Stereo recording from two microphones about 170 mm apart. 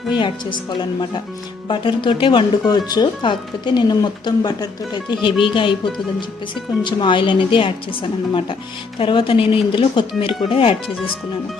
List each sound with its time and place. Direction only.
0.1 s speech: 30° left (ahead or behind)
1.6 s speech: 30° left (ahead or behind)
6.8 s speech: 30° left (ahead or behind)